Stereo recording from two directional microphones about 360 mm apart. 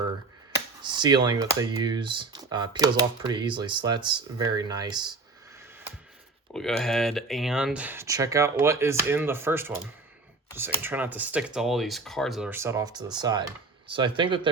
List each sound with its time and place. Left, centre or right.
0.8 s speech: centre
6.5 s speech: centre